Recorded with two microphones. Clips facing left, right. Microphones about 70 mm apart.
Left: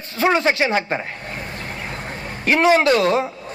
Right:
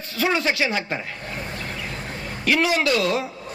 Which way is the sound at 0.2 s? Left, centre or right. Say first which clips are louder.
Left 4 dB; left.